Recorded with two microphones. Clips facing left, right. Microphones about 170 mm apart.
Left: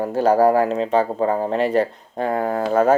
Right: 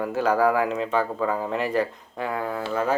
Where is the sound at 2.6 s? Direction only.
45° left (ahead or behind).